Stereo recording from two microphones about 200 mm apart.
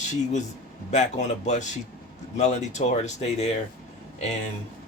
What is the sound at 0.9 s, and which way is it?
Speech, 35° left (ahead or behind).